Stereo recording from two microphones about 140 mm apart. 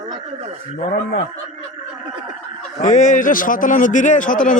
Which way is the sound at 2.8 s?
65° left (ahead or behind).